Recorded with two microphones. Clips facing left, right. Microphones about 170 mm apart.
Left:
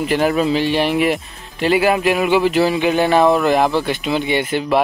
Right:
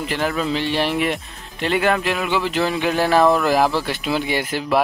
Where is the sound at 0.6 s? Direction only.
5° left (ahead or behind).